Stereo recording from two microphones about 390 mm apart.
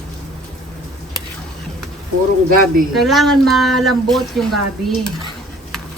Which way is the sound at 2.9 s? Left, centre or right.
Centre.